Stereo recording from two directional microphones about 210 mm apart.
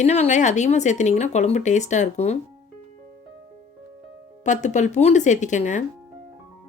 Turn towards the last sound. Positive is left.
turn(degrees=35)  # may be behind; listen again after turning